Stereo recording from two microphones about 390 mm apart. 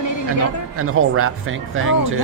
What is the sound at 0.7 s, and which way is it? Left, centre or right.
Speech, right.